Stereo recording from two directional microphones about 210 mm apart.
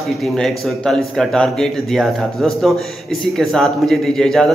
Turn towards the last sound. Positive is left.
turn(degrees=0)  # may be behind; listen again after turning